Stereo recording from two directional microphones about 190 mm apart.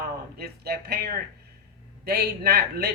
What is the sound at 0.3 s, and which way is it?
Speech, 55° right (ahead or behind).